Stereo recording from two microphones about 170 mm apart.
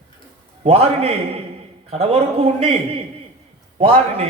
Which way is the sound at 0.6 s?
35° right (ahead or behind).